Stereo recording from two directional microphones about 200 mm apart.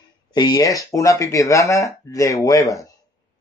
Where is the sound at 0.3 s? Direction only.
20° left (ahead or behind).